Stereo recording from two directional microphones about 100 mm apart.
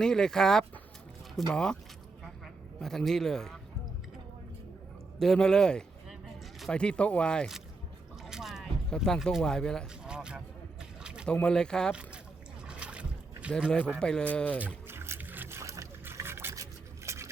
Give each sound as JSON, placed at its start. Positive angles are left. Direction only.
{"t": 0.0, "sound": "speech", "side_deg": 5}
{"t": 2.8, "sound": "speech", "side_deg": 5}
{"t": 5.2, "sound": "a sound", "side_deg": 5}
{"t": 6.7, "sound": "speech", "side_deg": 10}
{"t": 8.2, "sound": "biting", "side_deg": -5}
{"t": 9.0, "sound": "speech", "side_deg": 0}
{"t": 10.0, "sound": "boat", "side_deg": -10}
{"t": 11.3, "sound": "speech", "side_deg": 10}
{"t": 11.9, "sound": "speech", "side_deg": -10}
{"t": 12.6, "sound": "boat", "side_deg": -10}
{"t": 13.7, "sound": "speech", "side_deg": 10}
{"t": 14.8, "sound": "boat", "side_deg": -25}